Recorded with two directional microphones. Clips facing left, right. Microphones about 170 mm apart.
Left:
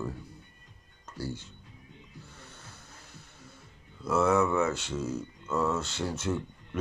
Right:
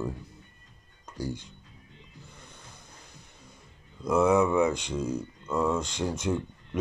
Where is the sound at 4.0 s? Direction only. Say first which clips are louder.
Right 3 dB; 15° right (ahead or behind).